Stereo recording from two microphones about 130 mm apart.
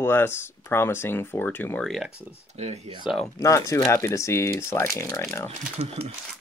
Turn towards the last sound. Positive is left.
turn(degrees=-50)  # may be behind; listen again after turning